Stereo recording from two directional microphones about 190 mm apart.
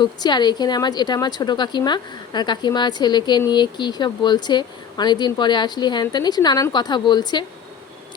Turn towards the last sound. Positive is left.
turn(degrees=25)  # may be behind; listen again after turning